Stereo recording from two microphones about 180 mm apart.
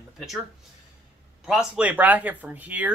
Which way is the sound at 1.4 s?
5° right (ahead or behind).